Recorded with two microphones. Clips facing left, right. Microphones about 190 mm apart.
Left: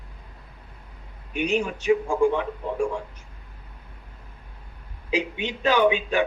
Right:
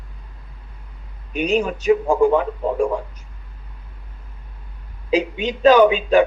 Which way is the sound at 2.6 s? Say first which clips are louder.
Right 6 dB; 90° right.